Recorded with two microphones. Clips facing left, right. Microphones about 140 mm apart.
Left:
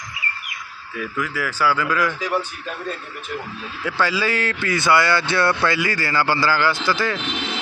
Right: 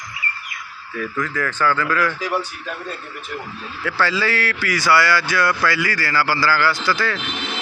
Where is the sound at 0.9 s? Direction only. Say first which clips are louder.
Right 2 dB; 10° left (ahead or behind).